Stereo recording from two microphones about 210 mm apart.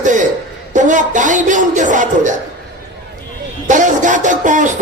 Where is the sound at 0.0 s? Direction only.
35° right (ahead or behind).